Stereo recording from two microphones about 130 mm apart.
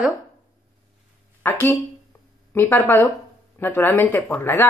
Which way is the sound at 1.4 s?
15° left (ahead or behind).